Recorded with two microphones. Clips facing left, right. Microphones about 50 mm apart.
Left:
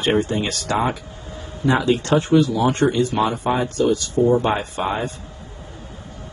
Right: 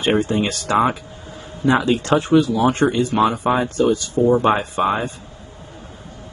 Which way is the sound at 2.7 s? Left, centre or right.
Centre.